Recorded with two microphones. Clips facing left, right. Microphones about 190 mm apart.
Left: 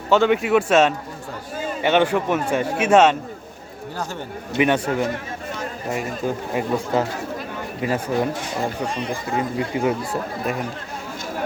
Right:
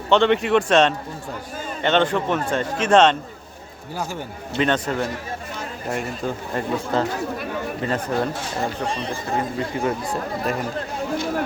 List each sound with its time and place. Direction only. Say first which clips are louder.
0.1 s a man's voice: even; 5° left (ahead or behind)
4.5 s a man's voice: left 2 dB; 15° left (ahead or behind)
8.9 s speech: left 1 dB; 30° right (ahead or behind)
9.7 s speech: left 2 dB; 10° left (ahead or behind)